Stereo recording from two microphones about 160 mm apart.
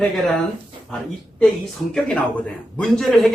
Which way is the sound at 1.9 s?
Centre (ahead or behind).